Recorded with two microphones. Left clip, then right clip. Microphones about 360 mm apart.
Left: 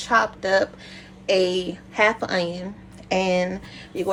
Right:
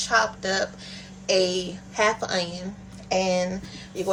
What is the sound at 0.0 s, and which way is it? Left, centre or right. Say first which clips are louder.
A woman's voice: left 2 dB; centre.